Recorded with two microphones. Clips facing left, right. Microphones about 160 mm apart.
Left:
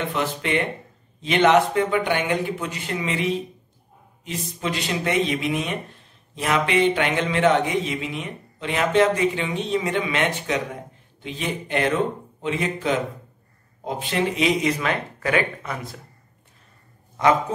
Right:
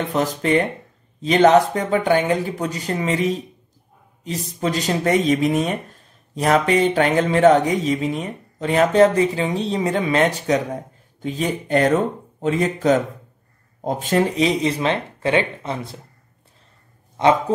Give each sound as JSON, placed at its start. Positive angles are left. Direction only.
{"t": 0.1, "sound": "speech", "side_deg": -40}
{"t": 17.2, "sound": "speech", "side_deg": -25}